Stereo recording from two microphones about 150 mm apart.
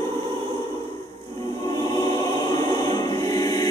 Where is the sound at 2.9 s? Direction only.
25° left (ahead or behind).